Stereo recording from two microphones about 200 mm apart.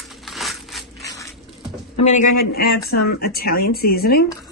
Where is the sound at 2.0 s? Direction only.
40° left (ahead or behind).